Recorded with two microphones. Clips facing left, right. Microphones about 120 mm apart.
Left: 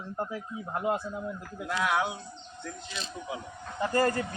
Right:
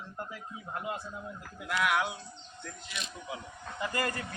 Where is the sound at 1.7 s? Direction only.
25° left (ahead or behind).